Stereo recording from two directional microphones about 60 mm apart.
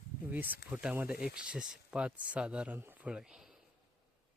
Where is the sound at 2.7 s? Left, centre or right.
Right.